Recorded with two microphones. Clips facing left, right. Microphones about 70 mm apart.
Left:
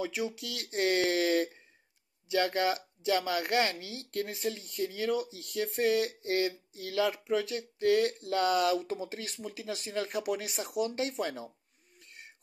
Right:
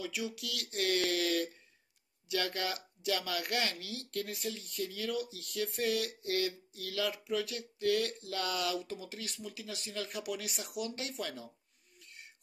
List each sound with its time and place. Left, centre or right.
0.0 s speech: left